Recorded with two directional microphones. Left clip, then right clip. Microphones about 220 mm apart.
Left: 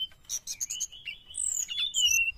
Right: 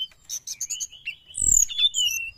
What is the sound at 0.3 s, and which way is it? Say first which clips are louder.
Bird: right 3 dB; centre (ahead or behind).